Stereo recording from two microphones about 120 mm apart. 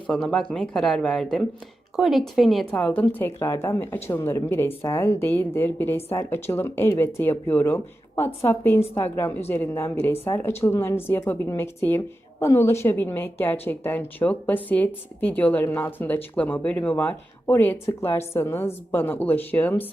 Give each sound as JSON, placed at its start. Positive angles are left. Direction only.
{"t": 0.1, "sound": "speech", "side_deg": 5}
{"t": 2.7, "sound": "a woman's voice", "side_deg": 15}